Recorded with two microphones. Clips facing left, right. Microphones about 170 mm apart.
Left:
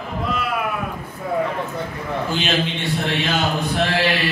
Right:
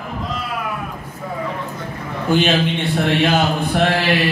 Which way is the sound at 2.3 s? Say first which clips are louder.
Right 9 dB; 55° right (ahead or behind).